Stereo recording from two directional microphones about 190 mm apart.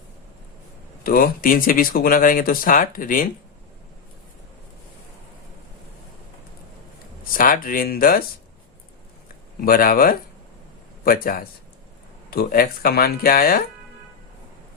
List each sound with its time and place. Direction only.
1.0 s speech: 50° left (ahead or behind)
7.3 s speech: 45° left (ahead or behind)
9.6 s a man's voice: 50° left (ahead or behind)